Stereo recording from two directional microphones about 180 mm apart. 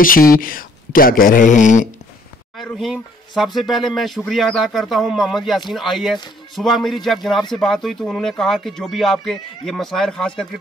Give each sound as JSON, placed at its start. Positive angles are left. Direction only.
{"t": 0.0, "sound": "speech", "side_deg": 50}
{"t": 2.5, "sound": "speech", "side_deg": 0}